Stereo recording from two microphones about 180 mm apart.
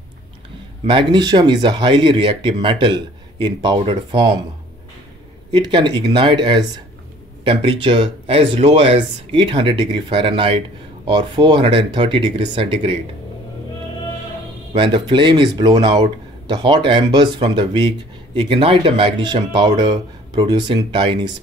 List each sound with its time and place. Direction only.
0.8 s speech: 25° right (ahead or behind)
5.5 s speech: 25° right (ahead or behind)
14.7 s speech: 25° right (ahead or behind)